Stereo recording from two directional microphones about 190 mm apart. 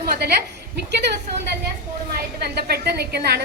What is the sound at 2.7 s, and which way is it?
Speech, 55° right (ahead or behind).